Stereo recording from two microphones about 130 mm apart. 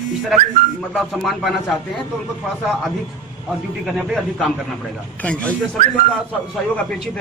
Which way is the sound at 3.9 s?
5° right (ahead or behind).